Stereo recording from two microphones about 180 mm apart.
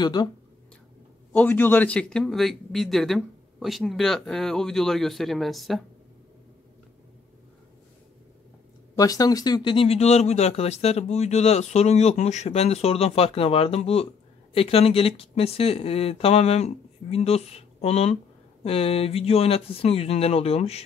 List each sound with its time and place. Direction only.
0.0 s speech: 25° left (ahead or behind)
1.3 s a man's voice: 10° left (ahead or behind)
8.9 s speech: 20° left (ahead or behind); by 20.8 s 35° left (ahead or behind)